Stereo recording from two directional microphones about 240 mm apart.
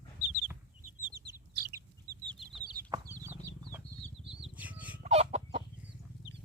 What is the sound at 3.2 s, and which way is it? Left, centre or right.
Chicken, centre.